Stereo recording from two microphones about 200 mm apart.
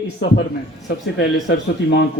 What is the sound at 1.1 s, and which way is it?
Speech, 55° left (ahead or behind).